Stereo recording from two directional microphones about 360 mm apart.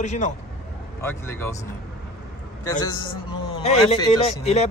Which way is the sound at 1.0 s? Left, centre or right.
Centre.